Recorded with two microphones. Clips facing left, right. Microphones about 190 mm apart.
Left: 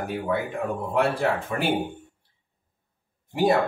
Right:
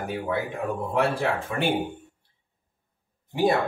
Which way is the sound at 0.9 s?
Centre (ahead or behind).